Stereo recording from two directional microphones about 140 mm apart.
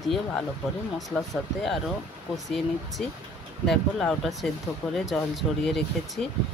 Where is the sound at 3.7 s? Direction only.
Centre (ahead or behind).